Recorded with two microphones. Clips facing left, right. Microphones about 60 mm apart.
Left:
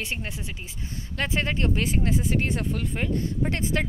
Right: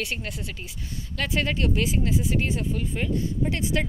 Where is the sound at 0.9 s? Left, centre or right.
Left.